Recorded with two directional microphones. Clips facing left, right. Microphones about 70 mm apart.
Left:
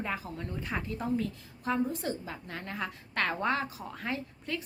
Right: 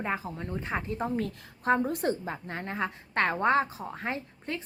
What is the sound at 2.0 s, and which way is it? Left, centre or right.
A woman's voice, right.